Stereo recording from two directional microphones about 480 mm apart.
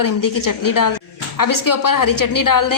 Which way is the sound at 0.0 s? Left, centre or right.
Left.